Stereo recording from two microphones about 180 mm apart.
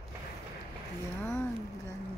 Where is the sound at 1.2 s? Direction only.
15° left (ahead or behind).